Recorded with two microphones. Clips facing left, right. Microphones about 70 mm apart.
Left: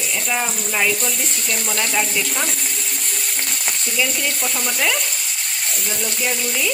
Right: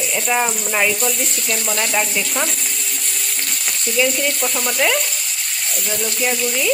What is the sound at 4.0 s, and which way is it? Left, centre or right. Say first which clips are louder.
Speech: right 5 dB; centre.